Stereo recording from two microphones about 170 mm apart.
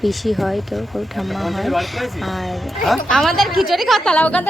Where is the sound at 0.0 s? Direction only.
Centre (ahead or behind).